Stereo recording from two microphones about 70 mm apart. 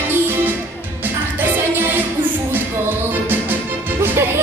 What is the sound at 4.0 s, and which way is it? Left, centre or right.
Music, right.